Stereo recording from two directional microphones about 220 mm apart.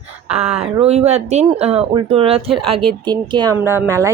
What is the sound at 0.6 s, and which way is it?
Speech, 30° right (ahead or behind).